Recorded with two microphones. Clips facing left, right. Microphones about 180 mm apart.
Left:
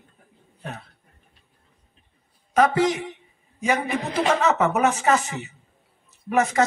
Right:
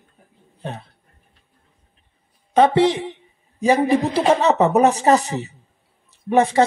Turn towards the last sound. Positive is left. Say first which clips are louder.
# right 5 dB
turn(degrees=-30)  # may be behind; listen again after turning